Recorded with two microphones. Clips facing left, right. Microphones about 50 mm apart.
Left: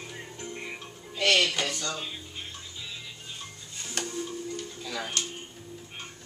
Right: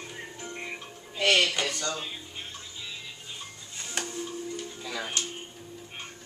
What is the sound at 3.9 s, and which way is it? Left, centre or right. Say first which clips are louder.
Music: left 1 dB; centre.